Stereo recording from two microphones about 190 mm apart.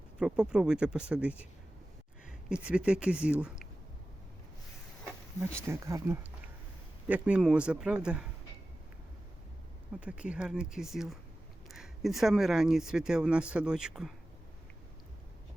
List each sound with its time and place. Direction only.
0.2 s speech: 5° right (ahead or behind)
2.5 s speech: 5° right (ahead or behind)
5.6 s speech: 15° right (ahead or behind)
10.0 s speech: 5° right (ahead or behind)